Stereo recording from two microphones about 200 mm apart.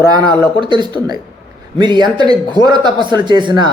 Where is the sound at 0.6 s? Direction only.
25° right (ahead or behind).